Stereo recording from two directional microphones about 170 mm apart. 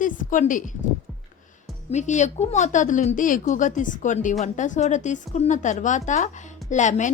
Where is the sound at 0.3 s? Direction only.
50° left (ahead or behind).